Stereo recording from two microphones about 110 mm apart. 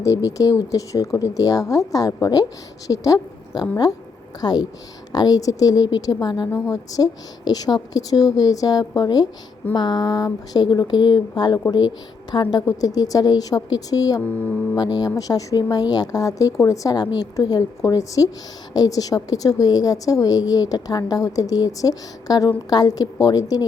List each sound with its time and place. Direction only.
0.0 s a woman's voice: 30° left (ahead or behind)